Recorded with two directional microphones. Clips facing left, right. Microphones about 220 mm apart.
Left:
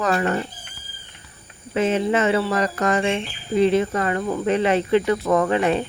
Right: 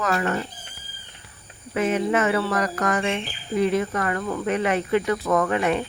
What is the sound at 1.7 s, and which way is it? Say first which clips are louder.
Bird: left 2 dB; 25° left (ahead or behind).